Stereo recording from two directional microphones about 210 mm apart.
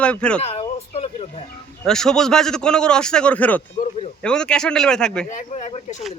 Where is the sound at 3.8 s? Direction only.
35° left (ahead or behind).